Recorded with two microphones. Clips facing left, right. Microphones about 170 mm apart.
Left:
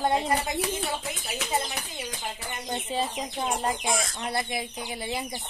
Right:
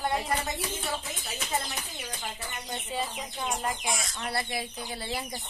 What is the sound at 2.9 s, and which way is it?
Speech, 30° left (ahead or behind).